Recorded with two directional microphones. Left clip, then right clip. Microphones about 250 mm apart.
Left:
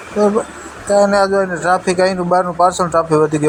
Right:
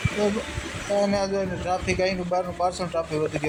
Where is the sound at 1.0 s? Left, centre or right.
Left.